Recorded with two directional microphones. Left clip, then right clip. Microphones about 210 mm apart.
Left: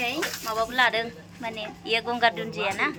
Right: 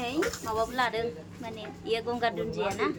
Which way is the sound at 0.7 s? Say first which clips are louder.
Left 6 dB; centre (ahead or behind).